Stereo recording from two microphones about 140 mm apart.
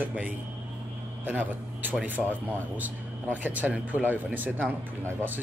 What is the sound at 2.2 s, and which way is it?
Speech, centre (ahead or behind).